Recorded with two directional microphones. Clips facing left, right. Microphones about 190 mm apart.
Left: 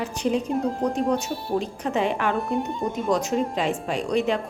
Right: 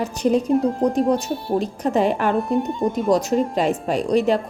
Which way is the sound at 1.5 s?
40° right (ahead or behind).